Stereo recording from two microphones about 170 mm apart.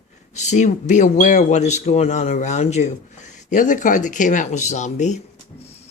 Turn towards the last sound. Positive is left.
turn(degrees=45)  # may be behind; listen again after turning